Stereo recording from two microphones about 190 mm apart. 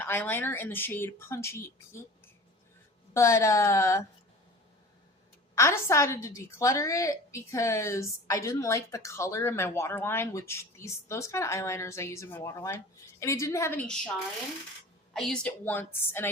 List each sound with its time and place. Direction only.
0.0 s a woman's voice: 10° left (ahead or behind)
3.2 s a woman's voice: 15° left (ahead or behind)
5.5 s a woman's voice: 15° left (ahead or behind)
15.1 s a woman's voice: 5° left (ahead or behind)